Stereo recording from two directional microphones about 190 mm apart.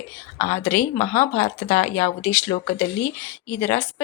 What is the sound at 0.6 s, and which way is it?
Speech, 10° left (ahead or behind).